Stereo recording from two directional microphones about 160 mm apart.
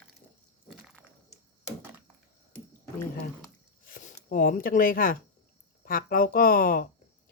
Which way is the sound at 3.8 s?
60° left (ahead or behind).